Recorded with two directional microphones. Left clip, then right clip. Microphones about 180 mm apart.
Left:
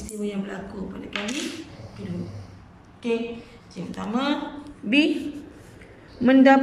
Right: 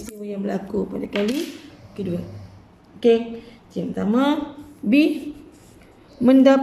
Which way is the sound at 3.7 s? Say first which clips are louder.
Right 7 dB; 40° right (ahead or behind).